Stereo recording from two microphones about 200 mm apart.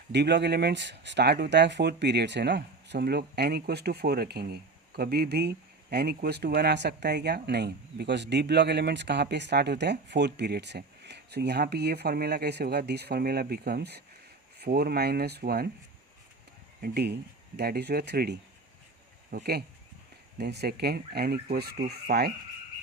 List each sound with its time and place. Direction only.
0.1 s speech: 60° right (ahead or behind)
16.8 s speech: 55° right (ahead or behind)